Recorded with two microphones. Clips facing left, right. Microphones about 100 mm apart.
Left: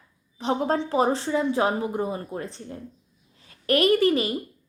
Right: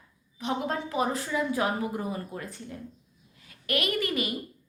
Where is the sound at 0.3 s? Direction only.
35° left (ahead or behind).